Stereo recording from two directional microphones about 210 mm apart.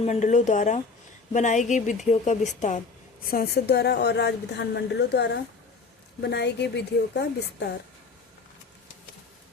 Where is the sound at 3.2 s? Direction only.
45° left (ahead or behind).